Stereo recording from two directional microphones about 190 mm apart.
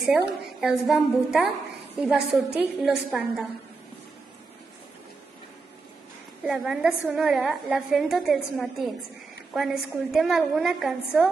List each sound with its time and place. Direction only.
0.0 s a woman's voice: 5° right (ahead or behind)
6.4 s a woman's voice: centre (ahead or behind)